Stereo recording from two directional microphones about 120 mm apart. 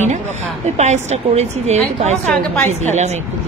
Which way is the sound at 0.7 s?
65° right (ahead or behind).